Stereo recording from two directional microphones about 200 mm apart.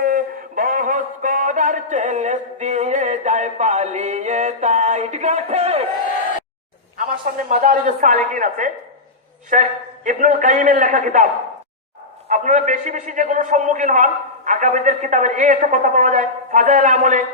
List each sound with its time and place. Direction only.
0.0 s a sound: 45° right (ahead or behind); by 5.9 s 30° right (ahead or behind)
7.5 s a man's voice: 40° right (ahead or behind)
12.3 s a man's voice: 40° right (ahead or behind)